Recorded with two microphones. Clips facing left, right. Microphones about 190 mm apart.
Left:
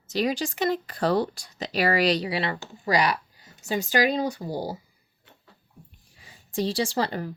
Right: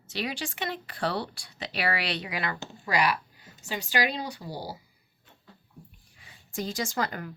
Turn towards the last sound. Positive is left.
turn(degrees=30)  # may be behind; listen again after turning